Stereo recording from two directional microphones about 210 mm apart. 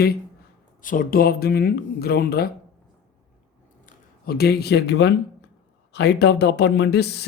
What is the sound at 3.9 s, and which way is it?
Speech, 45° left (ahead or behind).